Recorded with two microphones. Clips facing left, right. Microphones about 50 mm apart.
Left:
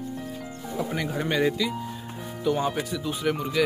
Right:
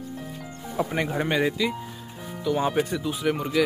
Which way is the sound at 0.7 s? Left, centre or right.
Right.